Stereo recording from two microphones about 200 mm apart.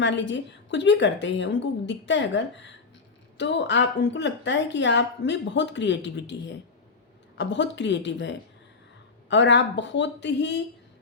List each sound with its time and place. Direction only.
0.0 s a woman's voice: 60° left (ahead or behind)
7.3 s a woman's voice: 60° left (ahead or behind)